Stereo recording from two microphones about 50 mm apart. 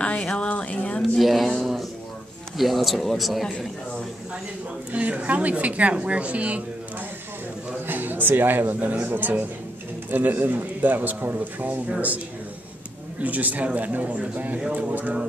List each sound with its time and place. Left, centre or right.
0.0 s a sound: left
1.1 s a sound: centre
2.5 s speech: centre
3.4 s speech: centre
4.9 s speech: right
7.8 s a man's voice: right
13.2 s speech: right